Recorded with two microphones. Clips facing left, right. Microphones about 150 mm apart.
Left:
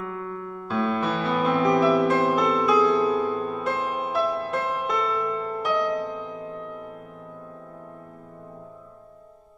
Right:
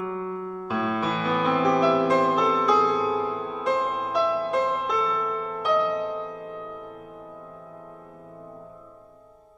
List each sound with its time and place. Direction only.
0.5 s music: 5° right (ahead or behind)